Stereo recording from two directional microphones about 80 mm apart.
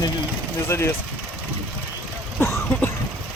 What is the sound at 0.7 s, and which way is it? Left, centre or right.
Speech, left.